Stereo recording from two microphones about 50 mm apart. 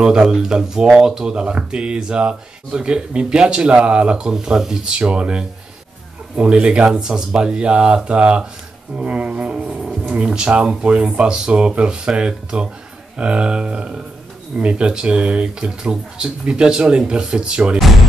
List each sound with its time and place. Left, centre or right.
0.0 s speech: centre